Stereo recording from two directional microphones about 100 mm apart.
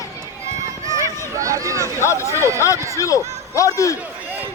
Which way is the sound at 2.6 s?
30° left (ahead or behind).